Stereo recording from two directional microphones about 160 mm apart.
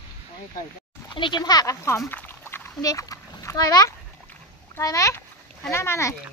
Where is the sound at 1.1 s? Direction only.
30° left (ahead or behind).